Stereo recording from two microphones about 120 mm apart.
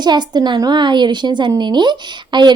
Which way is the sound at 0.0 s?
35° right (ahead or behind).